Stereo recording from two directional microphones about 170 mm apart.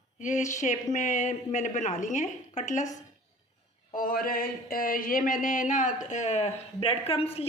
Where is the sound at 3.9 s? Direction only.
55° left (ahead or behind).